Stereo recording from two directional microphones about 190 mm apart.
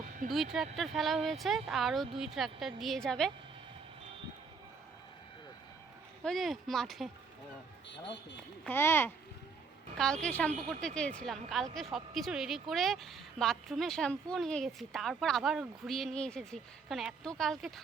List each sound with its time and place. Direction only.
0.3 s speech: centre (ahead or behind)
6.2 s speech: centre (ahead or behind)
8.6 s speech: 10° left (ahead or behind)
10.2 s speech: 5° left (ahead or behind)
10.5 s speech: 40° right (ahead or behind)
10.8 s speech: 5° left (ahead or behind)